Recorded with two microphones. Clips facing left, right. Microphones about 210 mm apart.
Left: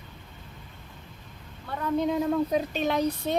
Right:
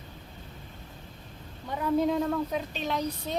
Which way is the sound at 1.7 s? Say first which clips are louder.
Right 1 dB; 10° right (ahead or behind).